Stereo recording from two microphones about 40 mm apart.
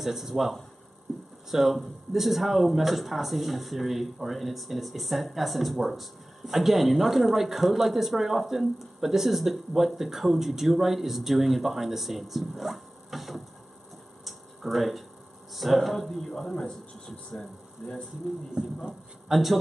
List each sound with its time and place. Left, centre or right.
0.0 s speech: centre
14.2 s tick-tock: centre
15.5 s speech: centre
18.6 s speech: right
19.3 s a man's voice: centre